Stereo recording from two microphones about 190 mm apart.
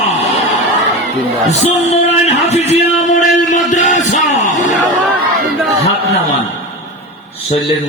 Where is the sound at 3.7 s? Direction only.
40° left (ahead or behind).